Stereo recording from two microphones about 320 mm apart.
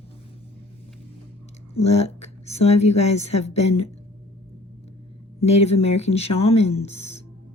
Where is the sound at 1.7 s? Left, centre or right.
Centre.